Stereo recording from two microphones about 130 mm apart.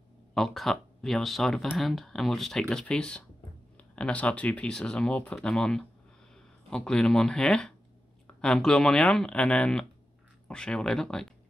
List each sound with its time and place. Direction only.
0.3 s speech: 5° left (ahead or behind)